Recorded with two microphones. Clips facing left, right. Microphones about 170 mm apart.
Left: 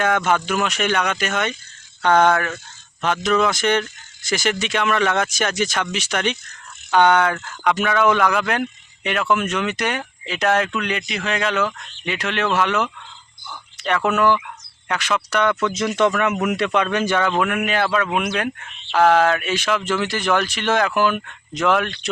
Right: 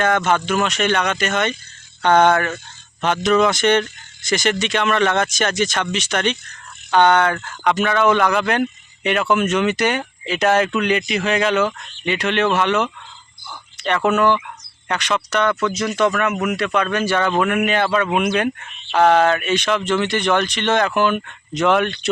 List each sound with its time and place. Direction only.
0.3 s speech: 5° left (ahead or behind)
16.5 s a man's voice: 25° left (ahead or behind)
17.2 s speech: centre (ahead or behind)